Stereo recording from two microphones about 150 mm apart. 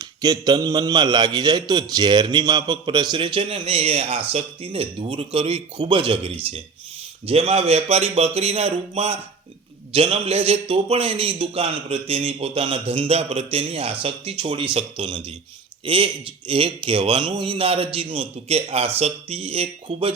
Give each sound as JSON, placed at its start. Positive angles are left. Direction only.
{"t": 0.0, "sound": "a man's voice", "side_deg": -25}